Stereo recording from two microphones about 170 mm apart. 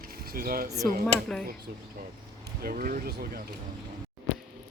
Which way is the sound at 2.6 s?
60° right (ahead or behind).